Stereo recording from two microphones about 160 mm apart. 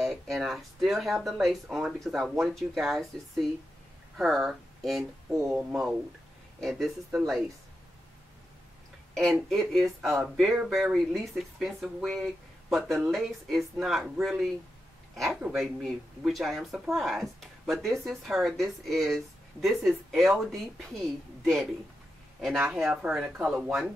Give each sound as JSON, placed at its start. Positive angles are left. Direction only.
{"t": 0.0, "sound": "speech", "side_deg": 0}
{"t": 9.1, "sound": "speech", "side_deg": 0}
{"t": 22.7, "sound": "speech", "side_deg": 0}